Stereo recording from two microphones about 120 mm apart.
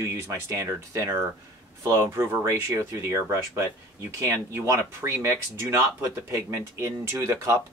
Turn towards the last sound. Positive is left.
turn(degrees=-25)  # may be behind; listen again after turning